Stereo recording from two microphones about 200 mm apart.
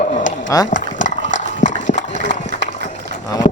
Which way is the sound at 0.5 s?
15° left (ahead or behind).